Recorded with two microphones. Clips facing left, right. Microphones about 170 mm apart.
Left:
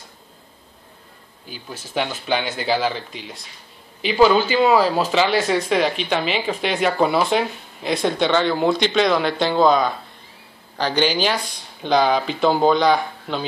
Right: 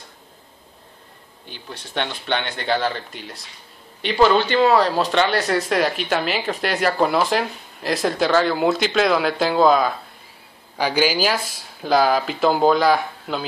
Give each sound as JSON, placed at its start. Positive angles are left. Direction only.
{"t": 1.5, "sound": "speech", "side_deg": 5}